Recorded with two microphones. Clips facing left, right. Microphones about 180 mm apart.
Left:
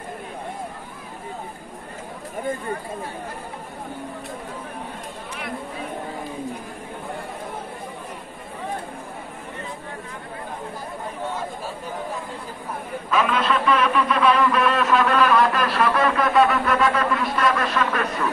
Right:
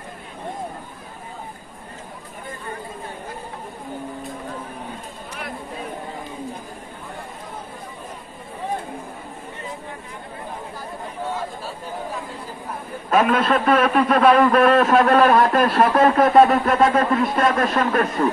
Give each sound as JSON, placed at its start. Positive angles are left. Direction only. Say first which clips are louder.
{"t": 13.1, "sound": "a man's voice", "louder": "right 4 dB", "side_deg": -50}